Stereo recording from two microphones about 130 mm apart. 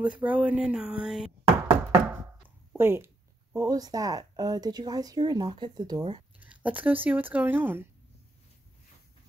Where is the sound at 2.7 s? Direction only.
20° right (ahead or behind).